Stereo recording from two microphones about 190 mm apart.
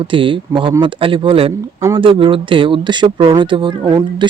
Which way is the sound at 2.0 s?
25° right (ahead or behind).